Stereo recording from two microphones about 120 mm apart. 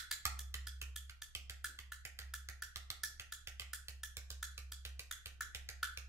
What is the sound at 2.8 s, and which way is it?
Wood block, 25° right (ahead or behind).